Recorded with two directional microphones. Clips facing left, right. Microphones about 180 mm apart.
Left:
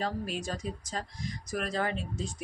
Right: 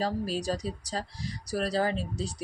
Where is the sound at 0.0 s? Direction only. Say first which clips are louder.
Right 4 dB; 35° right (ahead or behind).